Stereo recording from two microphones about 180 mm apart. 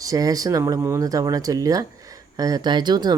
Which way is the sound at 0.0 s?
20° right (ahead or behind).